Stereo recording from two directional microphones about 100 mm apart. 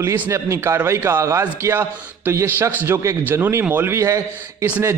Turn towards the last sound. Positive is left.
turn(degrees=-30)  # may be behind; listen again after turning